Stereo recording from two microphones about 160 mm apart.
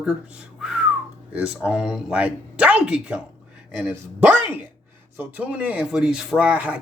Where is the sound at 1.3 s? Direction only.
5° right (ahead or behind).